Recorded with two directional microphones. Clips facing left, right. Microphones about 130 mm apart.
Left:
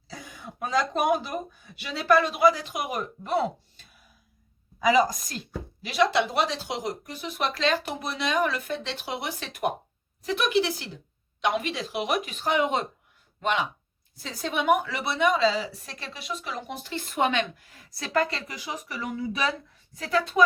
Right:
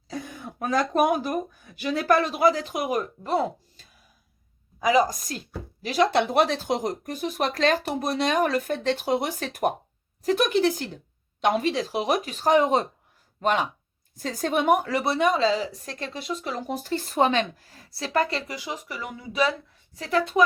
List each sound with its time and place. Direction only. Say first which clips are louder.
0.1 s speech: right 7 dB; 50° right (ahead or behind)
4.8 s a woman's voice: right 1 dB; 45° right (ahead or behind); by 20.4 s 25° right (ahead or behind)